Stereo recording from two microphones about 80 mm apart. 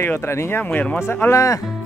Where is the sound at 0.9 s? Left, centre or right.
Left.